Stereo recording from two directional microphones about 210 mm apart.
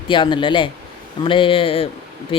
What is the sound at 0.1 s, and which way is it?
Speech, 25° left (ahead or behind).